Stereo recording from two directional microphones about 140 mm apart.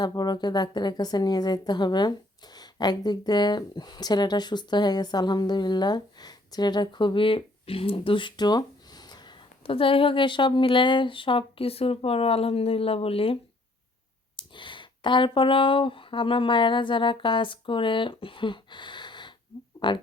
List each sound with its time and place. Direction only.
0.0 s speech: 30° left (ahead or behind)